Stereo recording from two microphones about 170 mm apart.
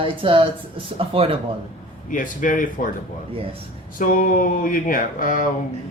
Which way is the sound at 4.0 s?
55° left (ahead or behind).